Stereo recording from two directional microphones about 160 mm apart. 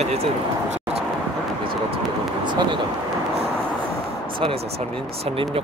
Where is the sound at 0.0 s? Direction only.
40° right (ahead or behind).